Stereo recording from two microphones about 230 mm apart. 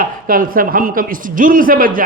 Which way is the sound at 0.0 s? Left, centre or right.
Right.